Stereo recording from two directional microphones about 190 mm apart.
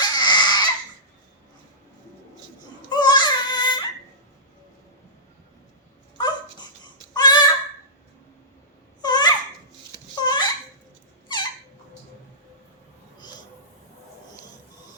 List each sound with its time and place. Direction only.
0.0 s a sound: 20° left (ahead or behind)
2.9 s baby cry: 20° left (ahead or behind)
6.1 s dog: 20° left (ahead or behind)
9.0 s babbling: 20° left (ahead or behind)